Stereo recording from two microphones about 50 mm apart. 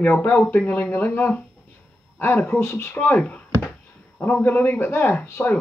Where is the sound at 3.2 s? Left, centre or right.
Left.